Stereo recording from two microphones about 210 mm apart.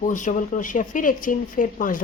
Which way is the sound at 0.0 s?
35° left (ahead or behind).